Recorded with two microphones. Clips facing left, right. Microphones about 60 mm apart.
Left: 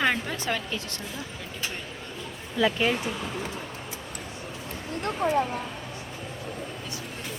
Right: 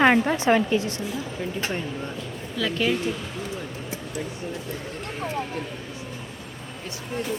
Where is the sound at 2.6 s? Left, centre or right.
Centre.